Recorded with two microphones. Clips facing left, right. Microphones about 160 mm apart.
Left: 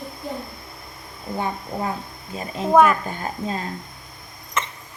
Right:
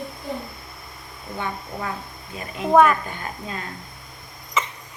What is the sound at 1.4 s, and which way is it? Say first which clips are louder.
Speech: left 3 dB; 30° left (ahead or behind).